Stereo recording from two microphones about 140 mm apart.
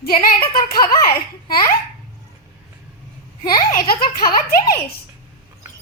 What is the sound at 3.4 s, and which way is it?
Speech, 30° left (ahead or behind).